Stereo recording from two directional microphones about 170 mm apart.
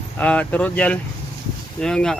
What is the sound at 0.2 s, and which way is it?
Speech, 5° left (ahead or behind).